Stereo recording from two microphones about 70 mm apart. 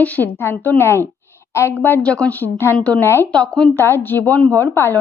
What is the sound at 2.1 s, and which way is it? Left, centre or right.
Speech, centre.